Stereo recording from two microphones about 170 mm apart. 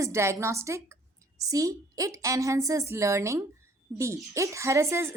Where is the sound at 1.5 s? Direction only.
20° right (ahead or behind).